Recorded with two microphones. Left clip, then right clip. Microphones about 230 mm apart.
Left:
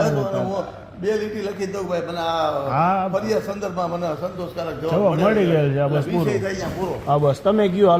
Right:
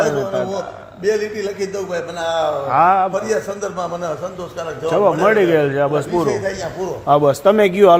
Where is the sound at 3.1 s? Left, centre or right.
Right.